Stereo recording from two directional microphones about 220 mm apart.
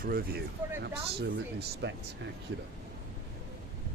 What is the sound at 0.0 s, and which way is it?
Speech, 40° right (ahead or behind).